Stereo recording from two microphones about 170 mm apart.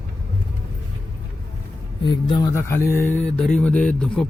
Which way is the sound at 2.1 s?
25° left (ahead or behind).